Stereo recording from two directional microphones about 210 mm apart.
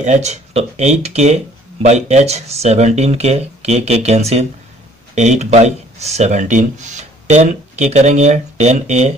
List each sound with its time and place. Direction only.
0.0 s speech: 35° right (ahead or behind)